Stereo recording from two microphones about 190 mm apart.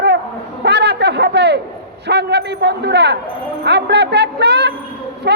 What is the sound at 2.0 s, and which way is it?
A man's voice, 60° right (ahead or behind).